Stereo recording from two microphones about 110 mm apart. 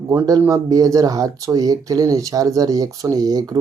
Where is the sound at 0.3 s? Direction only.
35° right (ahead or behind).